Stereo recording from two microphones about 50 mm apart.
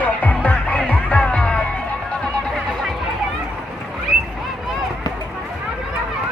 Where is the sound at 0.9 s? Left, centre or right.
Left.